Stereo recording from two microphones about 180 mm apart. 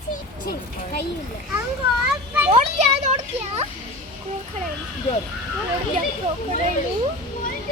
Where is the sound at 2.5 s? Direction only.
40° right (ahead or behind).